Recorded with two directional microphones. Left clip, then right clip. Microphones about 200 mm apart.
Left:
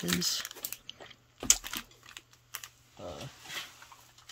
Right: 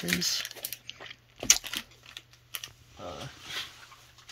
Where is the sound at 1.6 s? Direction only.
45° left (ahead or behind).